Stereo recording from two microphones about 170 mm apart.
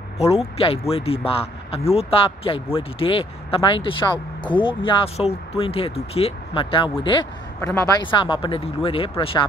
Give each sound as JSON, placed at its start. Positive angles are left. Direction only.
{"t": 0.2, "sound": "speech", "side_deg": 40}